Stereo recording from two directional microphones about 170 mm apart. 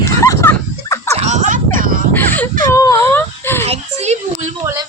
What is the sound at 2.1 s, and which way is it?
Whimper, 10° left (ahead or behind).